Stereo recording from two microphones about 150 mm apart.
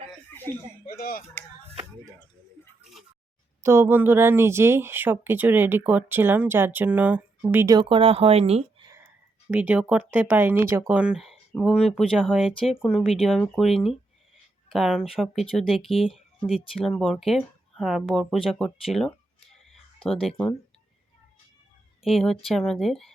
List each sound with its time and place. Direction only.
0.5 s speech: 15° left (ahead or behind)
0.9 s a sound: 75° left (ahead or behind)
3.6 s speech: 15° right (ahead or behind)
7.8 s speech: 35° right (ahead or behind)
9.5 s speech: 10° right (ahead or behind)
20.3 s speech: 10° left (ahead or behind)
22.0 s speech: centre (ahead or behind)